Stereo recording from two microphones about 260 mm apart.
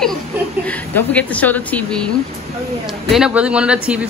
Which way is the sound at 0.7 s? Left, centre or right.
Centre.